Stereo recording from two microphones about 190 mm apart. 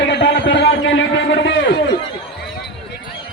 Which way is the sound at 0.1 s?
70° left (ahead or behind).